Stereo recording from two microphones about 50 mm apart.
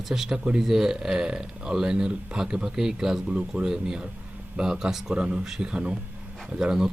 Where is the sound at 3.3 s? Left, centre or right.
Right.